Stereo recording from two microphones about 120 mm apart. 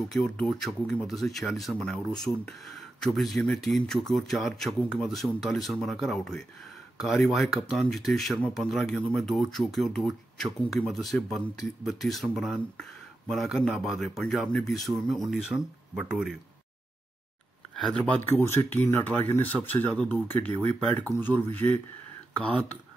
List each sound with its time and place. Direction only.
0.1 s speech: 5° left (ahead or behind)
17.7 s speech: 5° left (ahead or behind)